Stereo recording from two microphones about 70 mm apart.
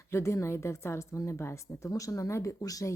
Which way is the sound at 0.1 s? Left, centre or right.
Left.